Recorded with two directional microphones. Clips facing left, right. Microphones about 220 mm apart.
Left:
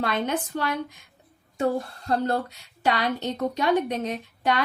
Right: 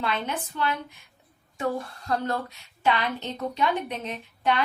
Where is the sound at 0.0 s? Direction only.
50° left (ahead or behind).